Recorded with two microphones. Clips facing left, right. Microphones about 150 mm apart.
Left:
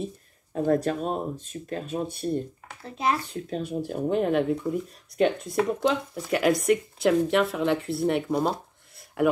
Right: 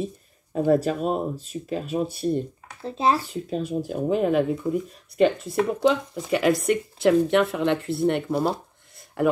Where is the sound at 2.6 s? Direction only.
25° right (ahead or behind).